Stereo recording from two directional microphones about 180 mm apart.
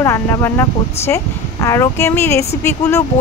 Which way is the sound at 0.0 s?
15° left (ahead or behind).